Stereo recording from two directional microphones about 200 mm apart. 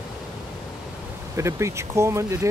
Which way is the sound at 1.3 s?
15° right (ahead or behind).